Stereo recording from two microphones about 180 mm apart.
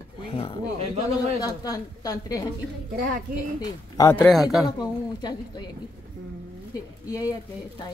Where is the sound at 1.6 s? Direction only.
20° left (ahead or behind).